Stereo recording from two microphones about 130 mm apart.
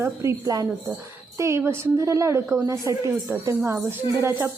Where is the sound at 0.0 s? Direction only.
25° right (ahead or behind).